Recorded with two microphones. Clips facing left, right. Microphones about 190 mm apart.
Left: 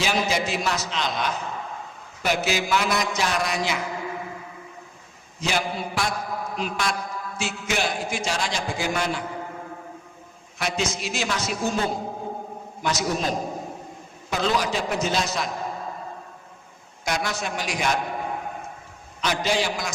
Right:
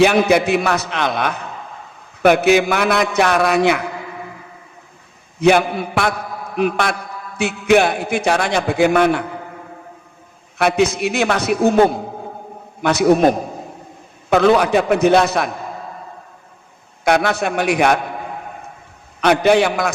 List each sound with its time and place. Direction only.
0.0 s a man's voice: 60° right (ahead or behind)
5.4 s a man's voice: 60° right (ahead or behind)
10.6 s a man's voice: 60° right (ahead or behind)
17.0 s a man's voice: 60° right (ahead or behind)
19.2 s a man's voice: 60° right (ahead or behind)